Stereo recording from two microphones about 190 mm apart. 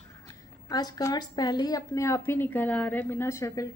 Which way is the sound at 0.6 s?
20° left (ahead or behind).